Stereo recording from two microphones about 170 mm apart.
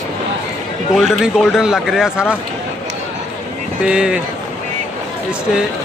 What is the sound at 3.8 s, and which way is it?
Speech, 5° right (ahead or behind).